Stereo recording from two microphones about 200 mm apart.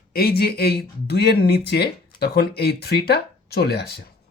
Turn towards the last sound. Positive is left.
turn(degrees=55)  # may be behind; listen again after turning